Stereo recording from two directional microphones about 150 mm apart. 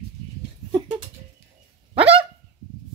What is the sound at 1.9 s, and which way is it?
Fowl, 40° right (ahead or behind).